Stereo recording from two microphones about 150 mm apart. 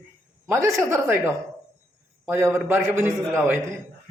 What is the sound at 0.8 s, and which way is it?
A man's voice, 15° right (ahead or behind).